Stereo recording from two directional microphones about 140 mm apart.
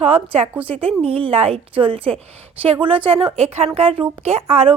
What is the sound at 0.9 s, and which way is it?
A woman's voice, 45° right (ahead or behind).